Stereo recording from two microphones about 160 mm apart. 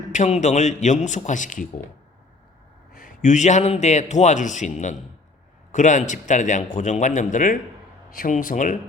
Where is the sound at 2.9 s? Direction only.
55° left (ahead or behind).